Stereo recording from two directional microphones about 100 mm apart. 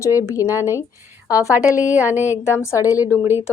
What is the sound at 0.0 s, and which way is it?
Speech, 30° left (ahead or behind).